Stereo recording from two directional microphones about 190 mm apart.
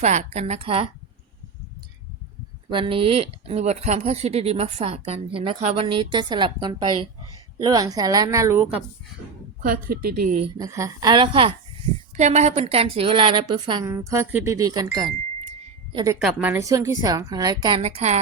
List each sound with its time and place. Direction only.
0.0 s speech: 40° right (ahead or behind)
2.6 s a woman's voice: 25° right (ahead or behind)
9.6 s a woman's voice: 50° right (ahead or behind)
10.6 s a woman's voice: 15° right (ahead or behind)
12.1 s a woman's voice: 35° right (ahead or behind); by 14.8 s 20° right (ahead or behind)
15.9 s a woman's voice: 25° right (ahead or behind)
16.1 s a woman's voice: 5° right (ahead or behind); by 18.2 s 35° right (ahead or behind)